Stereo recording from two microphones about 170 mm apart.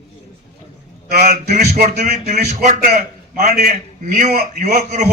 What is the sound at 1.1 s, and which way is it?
A man's voice, 65° right (ahead or behind).